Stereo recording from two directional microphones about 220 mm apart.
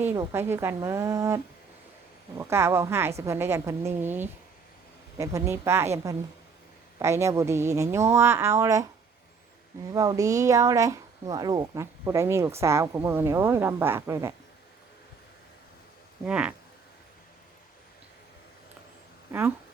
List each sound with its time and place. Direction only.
0.0 s speech: 10° right (ahead or behind)
2.4 s speech: 10° right (ahead or behind)
7.0 s speech: 15° right (ahead or behind)
9.9 s speech: 15° right (ahead or behind)
16.2 s speech: 5° right (ahead or behind)
19.3 s speech: 10° right (ahead or behind)